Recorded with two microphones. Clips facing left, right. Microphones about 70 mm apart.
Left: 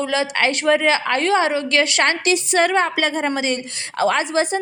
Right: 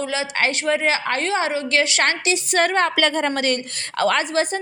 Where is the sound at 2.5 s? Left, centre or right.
Left.